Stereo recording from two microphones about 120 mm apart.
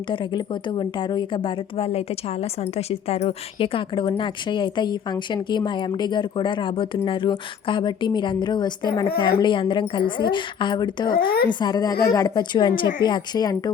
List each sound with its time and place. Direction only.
0.1 s a woman's voice: 40° left (ahead or behind); by 12.3 s 25° left (ahead or behind)
12.3 s a woman's voice: 40° left (ahead or behind)